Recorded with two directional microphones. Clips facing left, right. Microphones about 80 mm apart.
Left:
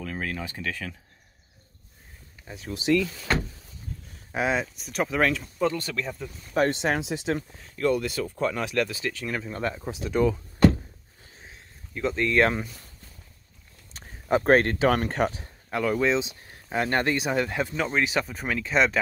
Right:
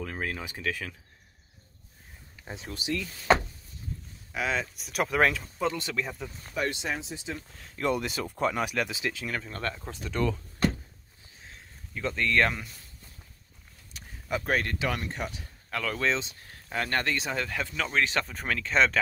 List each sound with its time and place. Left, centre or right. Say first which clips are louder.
0.0 s a sound: left 2 dB; centre
2.4 s speech: even; right
4.3 s speech: left 5 dB; left
4.7 s speech: even; centre
5.7 s speech: left 2 dB; centre
6.5 s speech: left 8 dB; left
7.0 s speech: left 9 dB; left
7.8 s speech: left 4 dB; centre
9.2 s speech: left 4 dB; centre
11.9 s speech: left 3 dB; centre
13.9 s speech: left 8 dB; left
15.3 s a sound: left 4 dB; left
15.8 s speech: left 6 dB; centre
18.0 s speech: left 2 dB; centre